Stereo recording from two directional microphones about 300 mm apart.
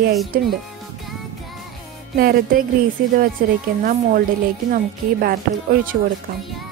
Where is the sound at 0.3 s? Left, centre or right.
Right.